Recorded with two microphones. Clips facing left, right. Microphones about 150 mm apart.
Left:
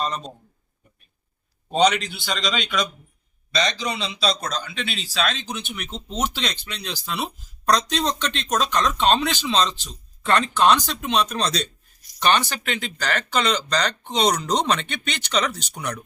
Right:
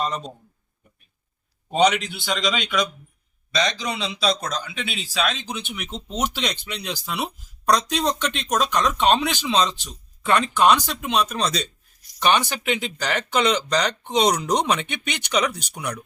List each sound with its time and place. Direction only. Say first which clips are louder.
1.7 s a man's voice: even; 5° right (ahead or behind)
2.0 s a man's voice: right 1 dB; 20° right (ahead or behind)
2.3 s a man's voice: right 2 dB; centre (ahead or behind)
3.5 s speech: even; 15° right (ahead or behind)